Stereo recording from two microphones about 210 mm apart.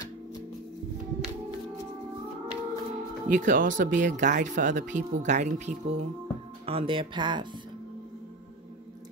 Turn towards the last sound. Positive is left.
turn(degrees=-20)  # may be behind; listen again after turning